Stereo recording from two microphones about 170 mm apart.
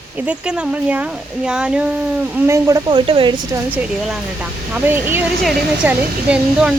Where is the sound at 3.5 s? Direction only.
10° right (ahead or behind).